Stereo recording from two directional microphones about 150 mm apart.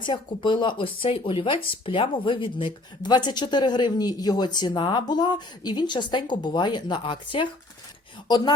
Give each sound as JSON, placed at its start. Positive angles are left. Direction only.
{"t": 0.0, "sound": "speech", "side_deg": 30}